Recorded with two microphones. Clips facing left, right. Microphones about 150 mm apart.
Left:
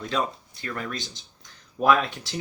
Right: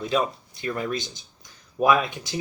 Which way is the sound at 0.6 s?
15° right (ahead or behind).